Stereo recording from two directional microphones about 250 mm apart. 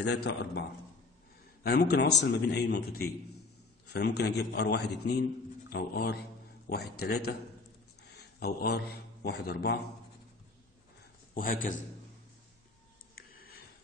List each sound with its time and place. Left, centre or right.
0.0 s a man's voice: left
11.3 s a man's voice: left
13.3 s a sound: left